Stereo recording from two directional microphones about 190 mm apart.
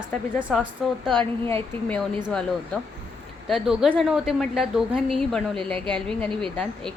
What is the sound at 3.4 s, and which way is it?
A woman's voice, centre (ahead or behind).